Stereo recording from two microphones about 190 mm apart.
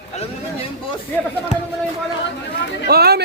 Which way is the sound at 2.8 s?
55° right (ahead or behind).